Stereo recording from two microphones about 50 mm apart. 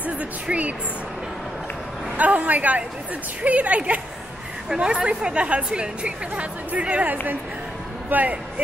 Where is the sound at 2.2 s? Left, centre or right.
Right.